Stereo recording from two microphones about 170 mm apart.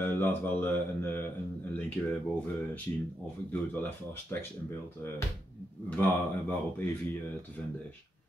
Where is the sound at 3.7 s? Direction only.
10° left (ahead or behind).